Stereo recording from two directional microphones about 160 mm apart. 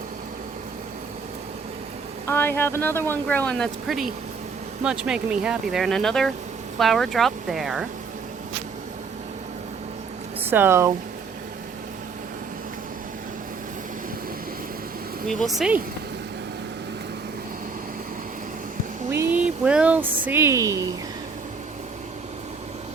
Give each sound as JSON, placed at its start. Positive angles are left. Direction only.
{"t": 2.2, "sound": "speech", "side_deg": 15}
{"t": 10.4, "sound": "speech", "side_deg": -15}
{"t": 15.3, "sound": "speech", "side_deg": 0}
{"t": 19.1, "sound": "speech", "side_deg": -15}
{"t": 19.5, "sound": "speech", "side_deg": -5}